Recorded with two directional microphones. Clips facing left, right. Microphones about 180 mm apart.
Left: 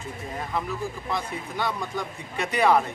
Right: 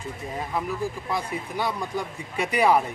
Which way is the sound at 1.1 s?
10° right (ahead or behind).